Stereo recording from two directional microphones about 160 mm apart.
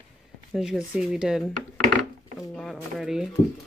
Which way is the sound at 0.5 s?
5° right (ahead or behind).